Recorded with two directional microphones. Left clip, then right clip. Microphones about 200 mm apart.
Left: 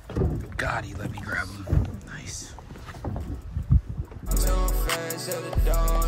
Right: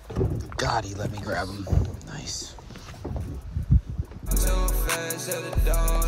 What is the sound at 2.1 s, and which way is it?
Whispering, 10° right (ahead or behind).